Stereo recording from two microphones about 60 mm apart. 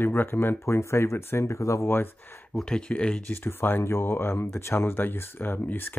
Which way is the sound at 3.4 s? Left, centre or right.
Left.